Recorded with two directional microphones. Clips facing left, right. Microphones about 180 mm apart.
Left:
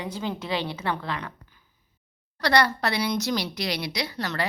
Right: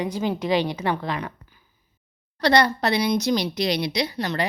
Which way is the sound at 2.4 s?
20° right (ahead or behind).